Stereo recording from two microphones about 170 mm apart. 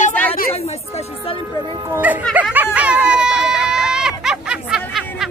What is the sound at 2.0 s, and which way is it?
Music, 10° right (ahead or behind).